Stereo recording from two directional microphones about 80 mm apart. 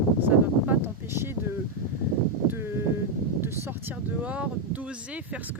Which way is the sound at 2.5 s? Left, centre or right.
Right.